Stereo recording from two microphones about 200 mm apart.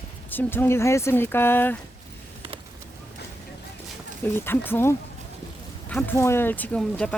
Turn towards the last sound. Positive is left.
turn(degrees=5)  # may be behind; listen again after turning